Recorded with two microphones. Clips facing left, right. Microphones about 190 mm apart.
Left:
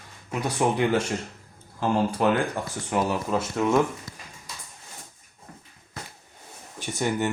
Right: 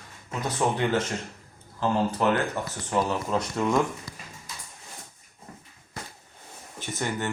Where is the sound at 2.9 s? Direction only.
10° left (ahead or behind).